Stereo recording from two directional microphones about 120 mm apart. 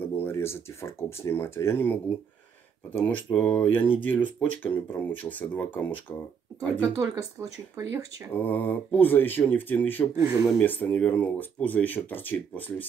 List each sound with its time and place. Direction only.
0.0 s speech: 15° left (ahead or behind)
7.0 s speech: 25° right (ahead or behind)
8.3 s speech: 15° left (ahead or behind)
10.1 s speech: 25° right (ahead or behind)
10.6 s speech: 15° left (ahead or behind)